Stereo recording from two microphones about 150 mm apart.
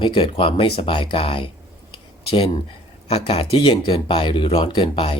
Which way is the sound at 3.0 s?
45° left (ahead or behind).